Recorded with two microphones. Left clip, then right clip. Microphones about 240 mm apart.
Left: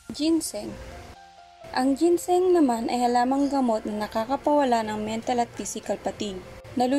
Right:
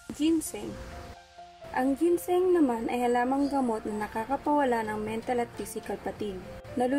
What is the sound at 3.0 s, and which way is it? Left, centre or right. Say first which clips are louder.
A woman's voice: left 4 dB; centre.